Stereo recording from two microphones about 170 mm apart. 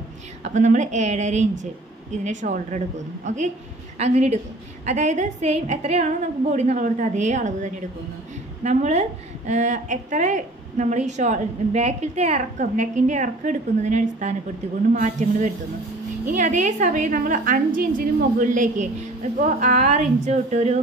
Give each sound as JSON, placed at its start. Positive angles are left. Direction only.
{"t": 0.4, "sound": "a woman's voice", "side_deg": -45}